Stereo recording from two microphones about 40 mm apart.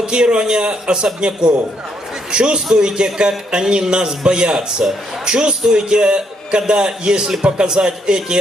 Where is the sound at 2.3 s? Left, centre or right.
Right.